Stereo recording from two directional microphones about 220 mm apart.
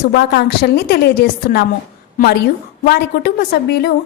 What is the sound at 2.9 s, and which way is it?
A woman's voice, 45° left (ahead or behind).